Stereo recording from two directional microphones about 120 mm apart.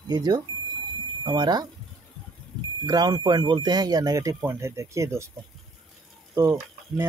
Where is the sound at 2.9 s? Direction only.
35° right (ahead or behind).